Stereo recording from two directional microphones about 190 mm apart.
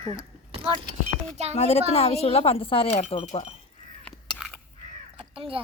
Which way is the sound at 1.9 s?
30° left (ahead or behind).